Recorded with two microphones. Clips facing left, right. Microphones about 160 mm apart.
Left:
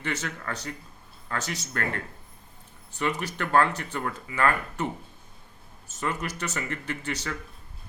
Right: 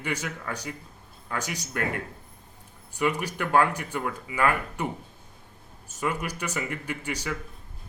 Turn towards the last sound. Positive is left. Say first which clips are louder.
# right 1 dB
turn(degrees=-10)  # may be behind; listen again after turning